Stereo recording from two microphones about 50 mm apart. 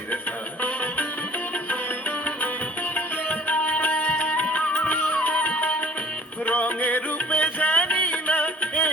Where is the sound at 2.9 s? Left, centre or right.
Left.